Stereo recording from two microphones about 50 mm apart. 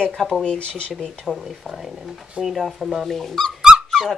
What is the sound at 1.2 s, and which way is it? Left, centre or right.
Speech, centre.